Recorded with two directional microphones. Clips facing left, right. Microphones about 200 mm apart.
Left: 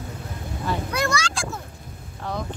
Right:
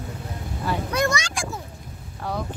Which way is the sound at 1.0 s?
20° right (ahead or behind).